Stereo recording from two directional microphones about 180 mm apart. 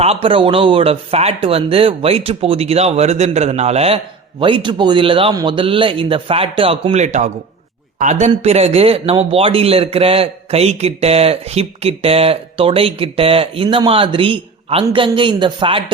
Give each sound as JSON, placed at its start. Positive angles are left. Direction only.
{"t": 0.0, "sound": "a woman's voice", "side_deg": -35}